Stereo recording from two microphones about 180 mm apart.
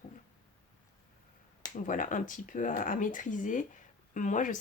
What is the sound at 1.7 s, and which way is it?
Speech, 45° left (ahead or behind).